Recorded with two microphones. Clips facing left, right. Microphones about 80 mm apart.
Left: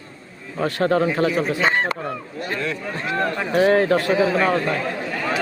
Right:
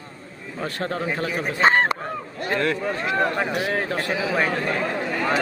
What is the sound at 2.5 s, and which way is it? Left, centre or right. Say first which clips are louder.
Speech: right 4 dB; right.